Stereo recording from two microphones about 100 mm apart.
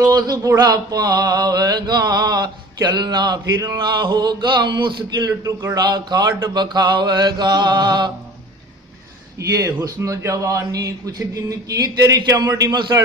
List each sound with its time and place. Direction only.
0.0 s mantra: 40° right (ahead or behind)
9.4 s a man's voice: 35° right (ahead or behind)